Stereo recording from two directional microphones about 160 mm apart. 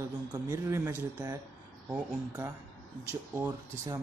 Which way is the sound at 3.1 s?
10° right (ahead or behind).